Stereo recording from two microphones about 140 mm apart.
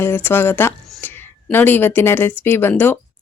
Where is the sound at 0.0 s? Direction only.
15° left (ahead or behind).